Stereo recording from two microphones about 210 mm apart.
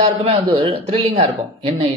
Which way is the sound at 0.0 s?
25° right (ahead or behind).